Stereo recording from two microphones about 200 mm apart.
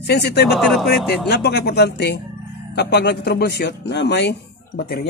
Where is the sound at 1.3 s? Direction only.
55° left (ahead or behind).